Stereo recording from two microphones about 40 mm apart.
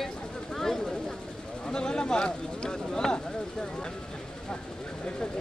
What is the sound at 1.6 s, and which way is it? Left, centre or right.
Speech, centre.